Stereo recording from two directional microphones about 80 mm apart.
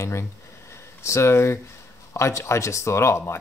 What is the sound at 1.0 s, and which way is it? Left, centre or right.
Speech, left.